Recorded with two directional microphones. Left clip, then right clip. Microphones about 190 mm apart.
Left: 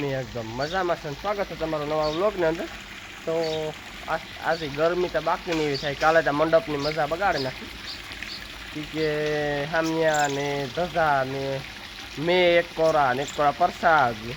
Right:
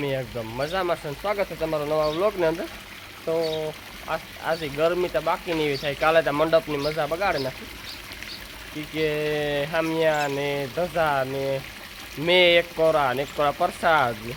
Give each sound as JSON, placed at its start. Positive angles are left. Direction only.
{"t": 0.0, "sound": "speech", "side_deg": -5}
{"t": 1.3, "sound": "speech", "side_deg": -15}
{"t": 4.1, "sound": "speech", "side_deg": 0}
{"t": 9.0, "sound": "speech", "side_deg": 0}